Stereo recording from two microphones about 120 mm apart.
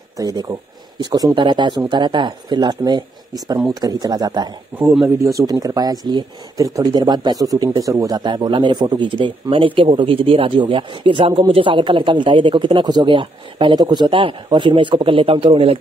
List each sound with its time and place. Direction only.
0.2 s speech: 35° right (ahead or behind); by 15.8 s 50° right (ahead or behind)